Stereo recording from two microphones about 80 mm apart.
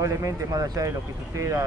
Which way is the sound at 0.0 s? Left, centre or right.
Right.